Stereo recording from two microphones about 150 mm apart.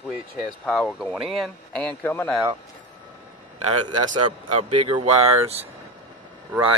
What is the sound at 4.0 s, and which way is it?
Speech, 30° right (ahead or behind).